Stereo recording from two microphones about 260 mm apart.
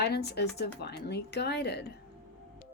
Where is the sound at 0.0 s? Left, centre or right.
Left.